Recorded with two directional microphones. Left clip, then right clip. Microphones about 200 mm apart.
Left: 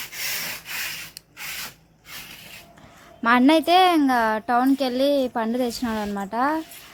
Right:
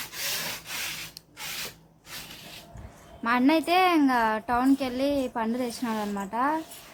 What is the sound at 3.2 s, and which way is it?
A child's voice, 35° left (ahead or behind).